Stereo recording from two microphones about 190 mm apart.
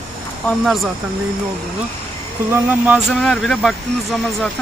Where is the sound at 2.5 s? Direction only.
10° right (ahead or behind).